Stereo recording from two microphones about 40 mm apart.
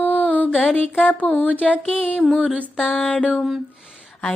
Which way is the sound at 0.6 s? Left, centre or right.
Left.